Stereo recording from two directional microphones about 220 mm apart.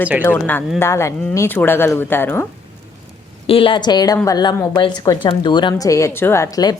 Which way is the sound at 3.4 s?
25° left (ahead or behind).